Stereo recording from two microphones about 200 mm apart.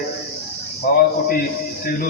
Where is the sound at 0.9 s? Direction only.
50° left (ahead or behind).